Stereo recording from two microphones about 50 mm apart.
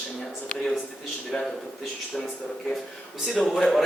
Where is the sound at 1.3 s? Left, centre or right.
Centre.